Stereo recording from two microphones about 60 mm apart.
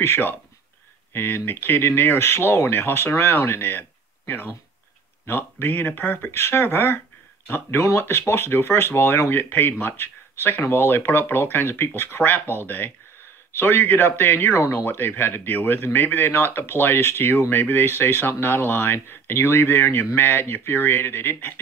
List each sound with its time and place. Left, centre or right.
0.0 s speech: left
5.2 s speech: left